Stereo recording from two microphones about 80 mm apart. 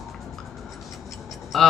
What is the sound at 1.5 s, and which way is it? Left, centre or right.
Speech, centre.